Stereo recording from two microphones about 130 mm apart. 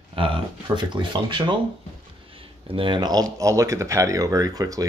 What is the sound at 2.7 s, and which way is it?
Speech, 40° right (ahead or behind).